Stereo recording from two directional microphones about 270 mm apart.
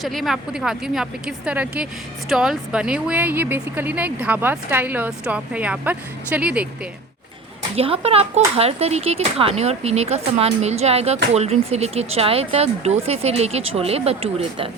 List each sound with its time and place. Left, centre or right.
0.0 s speech: centre
7.8 s speech: right